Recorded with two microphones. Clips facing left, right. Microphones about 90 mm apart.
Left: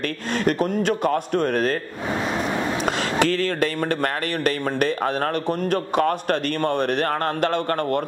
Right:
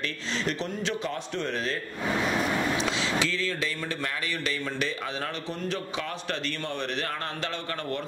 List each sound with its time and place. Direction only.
0.3 s speech: 50° left (ahead or behind)
2.0 s a sound: 30° left (ahead or behind)
2.8 s speech: 55° left (ahead or behind)